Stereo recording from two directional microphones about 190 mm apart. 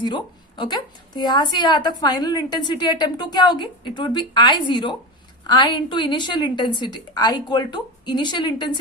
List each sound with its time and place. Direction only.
0.0 s a woman's voice: 25° left (ahead or behind)